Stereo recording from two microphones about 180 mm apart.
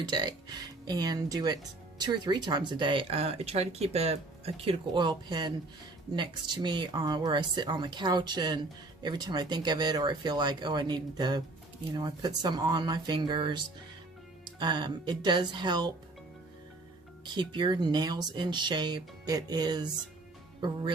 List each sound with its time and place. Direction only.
0.1 s speech: 25° right (ahead or behind)
14.6 s speech: 25° right (ahead or behind)
17.2 s speech: 25° right (ahead or behind)